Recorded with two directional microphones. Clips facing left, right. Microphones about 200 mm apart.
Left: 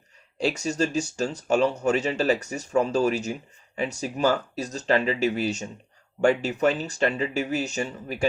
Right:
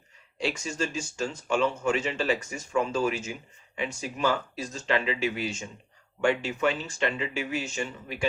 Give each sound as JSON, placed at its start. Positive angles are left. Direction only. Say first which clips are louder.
{"t": 0.3, "sound": "speech", "louder": "left 5 dB", "side_deg": 40}